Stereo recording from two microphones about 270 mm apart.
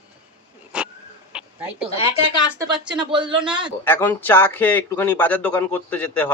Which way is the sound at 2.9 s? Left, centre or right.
Centre.